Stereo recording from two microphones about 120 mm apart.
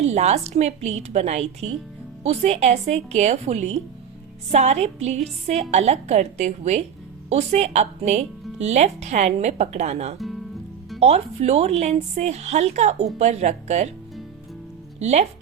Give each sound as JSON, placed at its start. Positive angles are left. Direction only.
{"t": 0.0, "sound": "speech", "side_deg": -65}
{"t": 10.2, "sound": "music", "side_deg": 0}
{"t": 11.0, "sound": "speech", "side_deg": -65}
{"t": 14.9, "sound": "speech", "side_deg": -70}